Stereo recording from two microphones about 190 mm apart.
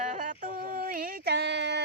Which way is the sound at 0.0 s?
40° right (ahead or behind).